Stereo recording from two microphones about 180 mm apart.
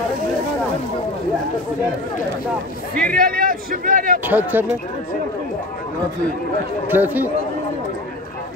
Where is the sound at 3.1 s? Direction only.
55° right (ahead or behind).